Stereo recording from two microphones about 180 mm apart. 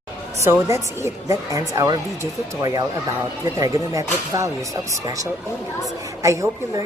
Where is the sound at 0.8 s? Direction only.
15° right (ahead or behind).